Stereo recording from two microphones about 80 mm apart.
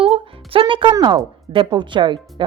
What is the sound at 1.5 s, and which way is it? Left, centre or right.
Speech, right.